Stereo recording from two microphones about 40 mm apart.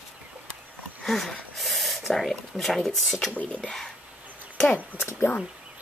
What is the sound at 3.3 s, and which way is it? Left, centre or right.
Speech, left.